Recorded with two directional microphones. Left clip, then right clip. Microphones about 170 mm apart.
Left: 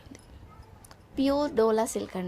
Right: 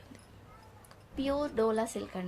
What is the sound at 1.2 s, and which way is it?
Speech, 40° left (ahead or behind).